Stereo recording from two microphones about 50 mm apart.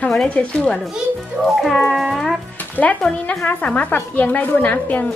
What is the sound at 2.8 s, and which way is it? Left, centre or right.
A woman's voice, left.